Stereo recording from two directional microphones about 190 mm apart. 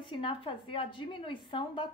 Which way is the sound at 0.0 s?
25° left (ahead or behind).